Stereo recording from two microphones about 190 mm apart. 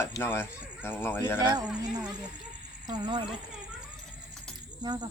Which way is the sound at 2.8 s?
25° right (ahead or behind).